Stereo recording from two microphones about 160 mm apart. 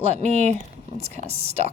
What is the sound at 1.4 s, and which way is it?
Speech, 40° right (ahead or behind).